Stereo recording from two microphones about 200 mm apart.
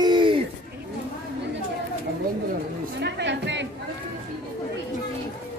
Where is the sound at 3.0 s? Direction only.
55° right (ahead or behind).